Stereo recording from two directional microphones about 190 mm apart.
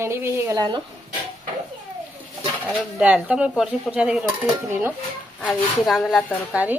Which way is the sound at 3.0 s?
5° right (ahead or behind).